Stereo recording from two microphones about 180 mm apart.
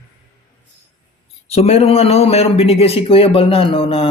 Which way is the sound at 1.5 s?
35° left (ahead or behind).